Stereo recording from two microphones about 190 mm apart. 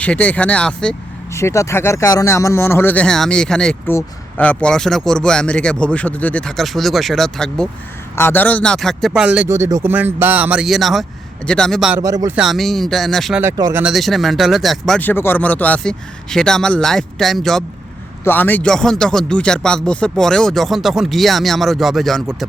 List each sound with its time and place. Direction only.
0.0 s speech: 5° left (ahead or behind)
1.3 s speech: 15° left (ahead or behind)
11.9 s speech: 15° right (ahead or behind)
12.4 s speech: centre (ahead or behind)
13.4 s speech: 15° right (ahead or behind)
13.8 s speech: centre (ahead or behind)